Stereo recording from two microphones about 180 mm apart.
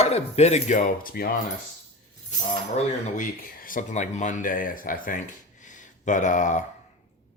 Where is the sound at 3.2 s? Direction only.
50° left (ahead or behind).